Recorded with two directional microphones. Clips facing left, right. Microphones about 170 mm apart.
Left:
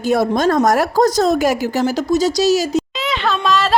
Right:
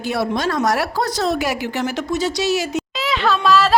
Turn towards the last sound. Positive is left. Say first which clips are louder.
# right 1 dB
turn(degrees=0)  # may be behind; listen again after turning